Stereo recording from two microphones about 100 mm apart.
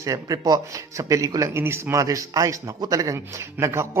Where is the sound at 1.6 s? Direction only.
25° right (ahead or behind).